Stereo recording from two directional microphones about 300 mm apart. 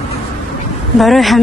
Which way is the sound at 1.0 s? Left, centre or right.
Centre.